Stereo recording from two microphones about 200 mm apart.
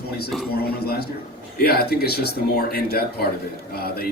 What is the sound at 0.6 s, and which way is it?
A man's voice, 50° left (ahead or behind).